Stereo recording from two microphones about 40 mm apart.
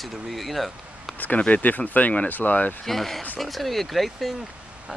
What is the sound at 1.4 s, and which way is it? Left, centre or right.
Speech, left.